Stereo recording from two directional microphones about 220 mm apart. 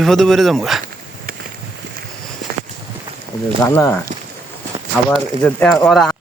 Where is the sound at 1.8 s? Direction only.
55° right (ahead or behind).